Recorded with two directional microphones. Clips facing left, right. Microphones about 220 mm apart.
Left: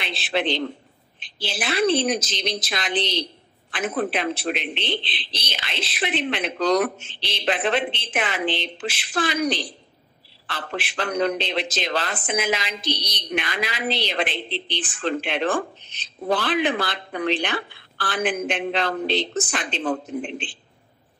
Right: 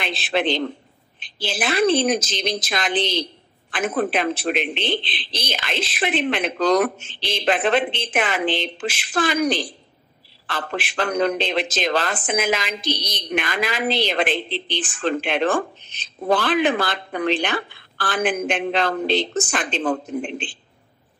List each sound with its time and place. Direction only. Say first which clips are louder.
0.0 s a man's voice: right 3 dB; 45° right (ahead or behind)